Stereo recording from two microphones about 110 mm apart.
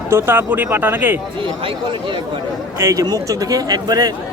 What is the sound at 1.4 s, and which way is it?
Speech, 50° right (ahead or behind).